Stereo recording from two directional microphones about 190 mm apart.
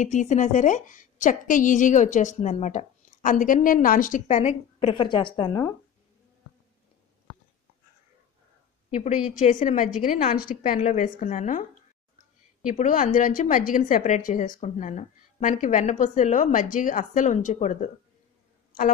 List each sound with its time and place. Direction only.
0.0 s a woman's voice: 40° left (ahead or behind); by 5.7 s 20° left (ahead or behind)
8.9 s a woman's voice: 40° left (ahead or behind)
12.6 s a woman's voice: 45° left (ahead or behind)